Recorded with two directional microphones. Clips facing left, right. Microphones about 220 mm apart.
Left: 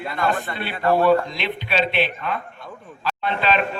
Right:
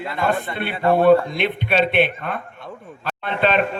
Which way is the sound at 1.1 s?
55° right (ahead or behind).